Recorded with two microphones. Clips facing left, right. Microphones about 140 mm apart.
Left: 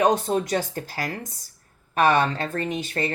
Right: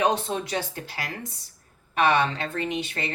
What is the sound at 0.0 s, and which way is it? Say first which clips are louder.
A woman's voice: left 4 dB; 45° left (ahead or behind).